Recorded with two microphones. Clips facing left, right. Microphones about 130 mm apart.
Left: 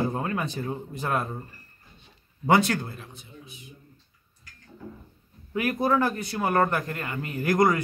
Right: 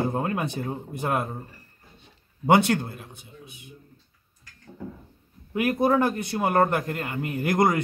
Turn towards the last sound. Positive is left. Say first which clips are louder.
# even
turn(degrees=-25)  # may be behind; listen again after turning